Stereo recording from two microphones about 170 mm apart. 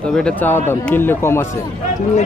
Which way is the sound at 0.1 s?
10° left (ahead or behind).